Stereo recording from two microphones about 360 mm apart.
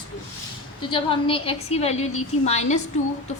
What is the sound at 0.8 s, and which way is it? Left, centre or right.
A woman's voice, centre.